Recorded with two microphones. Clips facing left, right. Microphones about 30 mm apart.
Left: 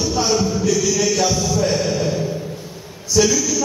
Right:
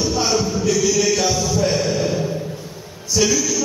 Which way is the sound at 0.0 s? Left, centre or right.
Centre.